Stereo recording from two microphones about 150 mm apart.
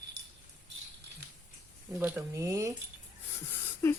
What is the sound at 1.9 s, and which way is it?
Speech, 10° right (ahead or behind).